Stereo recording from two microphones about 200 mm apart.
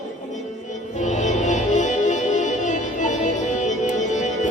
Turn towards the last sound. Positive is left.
turn(degrees=35)  # may be behind; listen again after turning